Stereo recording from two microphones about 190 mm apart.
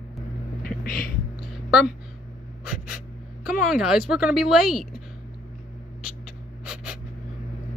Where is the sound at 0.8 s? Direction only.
50° left (ahead or behind).